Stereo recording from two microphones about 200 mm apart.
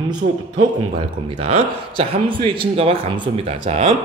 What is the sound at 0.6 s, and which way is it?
A man's voice, 30° right (ahead or behind).